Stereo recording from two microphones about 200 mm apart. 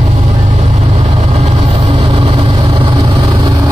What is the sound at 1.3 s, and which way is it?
Vehicle, 30° right (ahead or behind).